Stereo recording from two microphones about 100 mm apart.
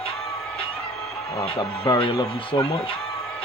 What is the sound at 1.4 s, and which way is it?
Speech, 60° left (ahead or behind).